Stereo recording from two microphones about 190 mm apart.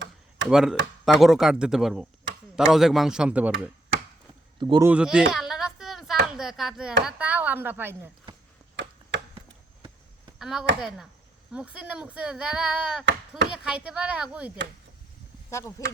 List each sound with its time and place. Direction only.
0.5 s speech: centre (ahead or behind)
4.6 s speech: 25° right (ahead or behind)
4.9 s a sound: 5° right (ahead or behind)
7.0 s speech: 5° right (ahead or behind)
10.3 s speech: centre (ahead or behind)
15.4 s speech: 15° left (ahead or behind)